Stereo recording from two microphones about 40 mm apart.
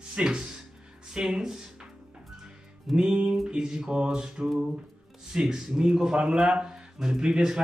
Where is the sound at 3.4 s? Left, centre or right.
Centre.